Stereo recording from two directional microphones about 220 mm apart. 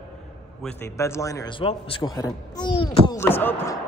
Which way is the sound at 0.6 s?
10° left (ahead or behind).